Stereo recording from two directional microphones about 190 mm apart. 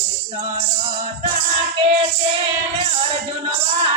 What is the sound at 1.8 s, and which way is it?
Music, 25° right (ahead or behind).